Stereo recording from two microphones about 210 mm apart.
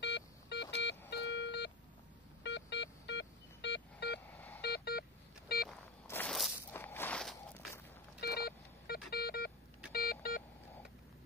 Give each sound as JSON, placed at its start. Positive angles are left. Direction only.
{"t": 0.0, "sound": "a sound", "side_deg": 55}
{"t": 2.4, "sound": "telephone dialing", "side_deg": 55}
{"t": 4.3, "sound": "telephone dialing", "side_deg": 10}
{"t": 4.6, "sound": "telephone dialing", "side_deg": 50}
{"t": 5.5, "sound": "vehicle", "side_deg": 50}
{"t": 6.0, "sound": "walk", "side_deg": 5}
{"t": 8.2, "sound": "a sound", "side_deg": 50}
{"t": 9.9, "sound": "telephone dialing", "side_deg": 45}